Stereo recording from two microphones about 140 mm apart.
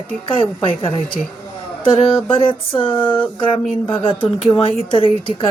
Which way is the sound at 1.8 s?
40° left (ahead or behind).